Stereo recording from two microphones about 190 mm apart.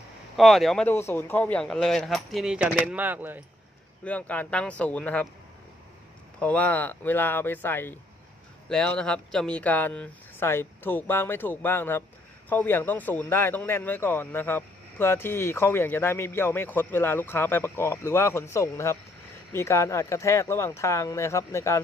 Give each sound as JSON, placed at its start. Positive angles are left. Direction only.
{"t": 0.3, "sound": "speech", "side_deg": 0}
{"t": 4.0, "sound": "speech", "side_deg": 5}
{"t": 6.4, "sound": "speech", "side_deg": 10}